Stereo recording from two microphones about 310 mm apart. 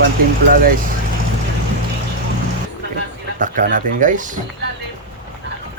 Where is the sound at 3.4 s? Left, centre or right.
Right.